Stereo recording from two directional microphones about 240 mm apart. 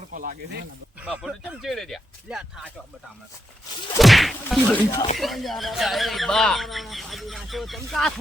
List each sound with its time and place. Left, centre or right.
0.1 s speech: right
1.0 s speech: centre
3.9 s speech: centre